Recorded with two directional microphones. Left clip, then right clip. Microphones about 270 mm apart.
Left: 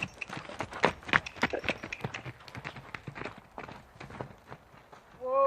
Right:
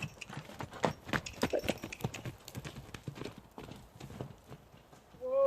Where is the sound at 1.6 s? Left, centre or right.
Right.